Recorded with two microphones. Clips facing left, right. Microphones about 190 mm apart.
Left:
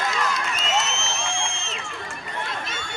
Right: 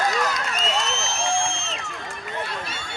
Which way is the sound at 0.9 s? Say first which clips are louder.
Right 4 dB; 35° right (ahead or behind).